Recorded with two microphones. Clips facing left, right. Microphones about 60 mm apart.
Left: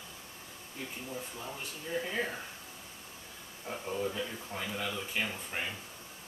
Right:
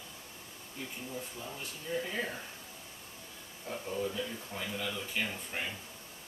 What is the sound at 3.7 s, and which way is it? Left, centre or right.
Speech, centre.